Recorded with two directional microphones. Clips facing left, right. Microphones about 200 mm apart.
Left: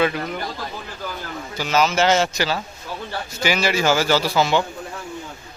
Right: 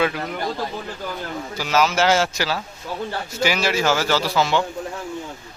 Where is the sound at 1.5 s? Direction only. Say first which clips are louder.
Left 1 dB; 5° right (ahead or behind).